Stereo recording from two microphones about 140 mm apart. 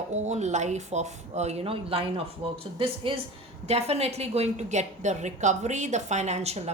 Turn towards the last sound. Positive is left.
turn(degrees=-50)  # may be behind; listen again after turning